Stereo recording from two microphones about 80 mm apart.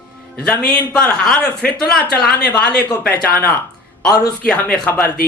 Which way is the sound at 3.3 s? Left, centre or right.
Left.